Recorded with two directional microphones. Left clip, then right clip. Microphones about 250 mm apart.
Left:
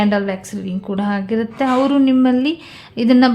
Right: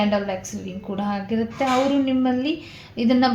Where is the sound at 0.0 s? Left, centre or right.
Left.